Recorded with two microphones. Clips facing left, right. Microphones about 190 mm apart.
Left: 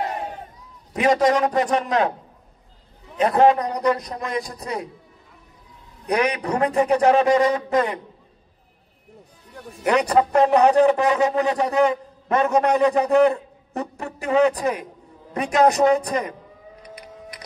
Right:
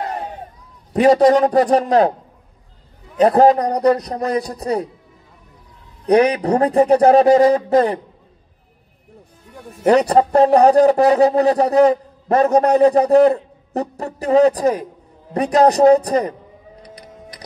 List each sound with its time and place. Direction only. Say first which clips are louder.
0.9 s a man's voice: right 7 dB; 35° right (ahead or behind)
3.2 s a man's voice: right 5 dB; 35° right (ahead or behind)
6.0 s a man's voice: right 8 dB; 35° right (ahead or behind)
9.8 s a man's voice: right 5 dB; 35° right (ahead or behind)
16.8 s printer: even; 35° right (ahead or behind)